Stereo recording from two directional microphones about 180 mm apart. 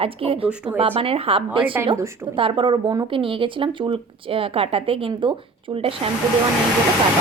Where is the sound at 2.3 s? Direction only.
30° right (ahead or behind).